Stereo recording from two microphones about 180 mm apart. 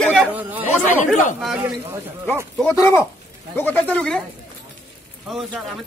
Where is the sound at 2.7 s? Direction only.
15° left (ahead or behind).